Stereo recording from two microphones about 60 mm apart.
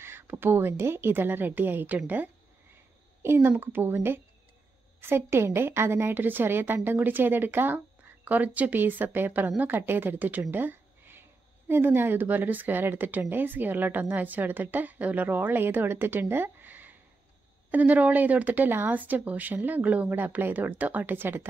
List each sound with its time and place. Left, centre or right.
0.3 s a woman's voice: right
3.2 s a woman's voice: right